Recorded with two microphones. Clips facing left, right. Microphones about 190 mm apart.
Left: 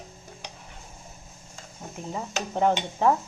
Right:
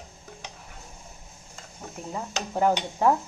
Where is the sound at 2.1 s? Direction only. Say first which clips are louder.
Even; 5° right (ahead or behind).